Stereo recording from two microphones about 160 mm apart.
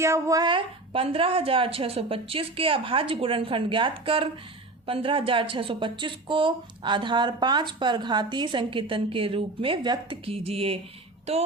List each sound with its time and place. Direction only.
0.0 s speech: 20° right (ahead or behind); by 10.8 s 40° right (ahead or behind)